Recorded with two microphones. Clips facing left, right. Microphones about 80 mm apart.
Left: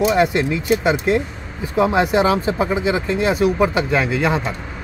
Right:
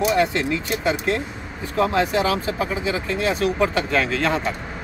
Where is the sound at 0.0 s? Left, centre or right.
Centre.